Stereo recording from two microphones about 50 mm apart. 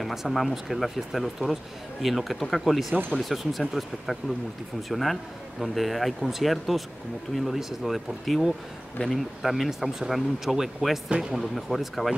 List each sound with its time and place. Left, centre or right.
0.0 s speech: centre
9.0 s speech: left
9.4 s speech: centre
11.1 s speech: centre
11.3 s speech: centre